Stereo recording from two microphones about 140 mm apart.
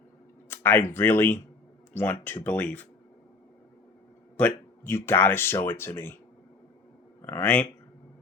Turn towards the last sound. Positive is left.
turn(degrees=10)  # may be behind; listen again after turning